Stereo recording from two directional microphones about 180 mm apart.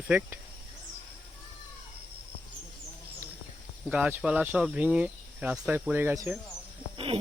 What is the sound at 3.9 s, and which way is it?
Speech, 5° right (ahead or behind).